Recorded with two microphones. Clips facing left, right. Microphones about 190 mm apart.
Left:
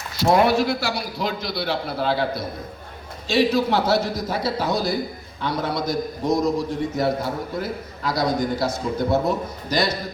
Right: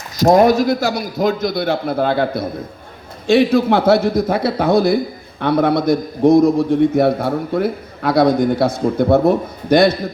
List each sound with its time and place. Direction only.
0.2 s a man's voice: 40° right (ahead or behind)